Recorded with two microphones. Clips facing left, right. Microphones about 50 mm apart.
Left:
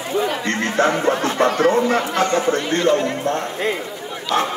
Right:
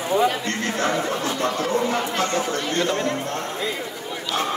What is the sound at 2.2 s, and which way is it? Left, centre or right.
Speech, left.